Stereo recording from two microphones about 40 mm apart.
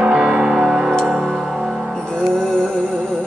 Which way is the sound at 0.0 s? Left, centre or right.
Centre.